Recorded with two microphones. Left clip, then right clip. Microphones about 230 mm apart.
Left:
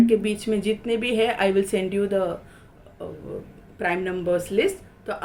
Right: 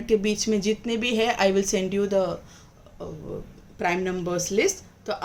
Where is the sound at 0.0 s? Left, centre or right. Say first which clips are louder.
Left 2 dB; right.